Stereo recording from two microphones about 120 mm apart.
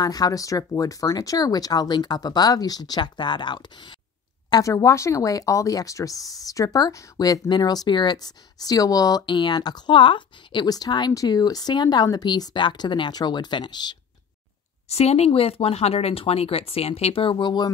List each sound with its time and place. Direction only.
0.0 s speech: 30° left (ahead or behind)
4.5 s speech: 30° left (ahead or behind)
14.9 s speech: 60° left (ahead or behind); by 17.6 s 35° left (ahead or behind)